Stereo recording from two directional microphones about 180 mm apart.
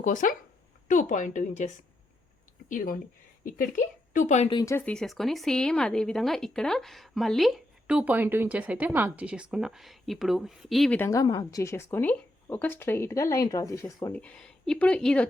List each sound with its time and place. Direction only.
0.0 s a woman's voice: 45° left (ahead or behind)
4.5 s speech: 15° left (ahead or behind)
4.9 s a woman's voice: centre (ahead or behind)